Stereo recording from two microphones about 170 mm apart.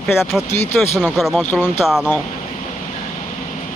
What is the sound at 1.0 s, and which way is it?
Speech, centre (ahead or behind).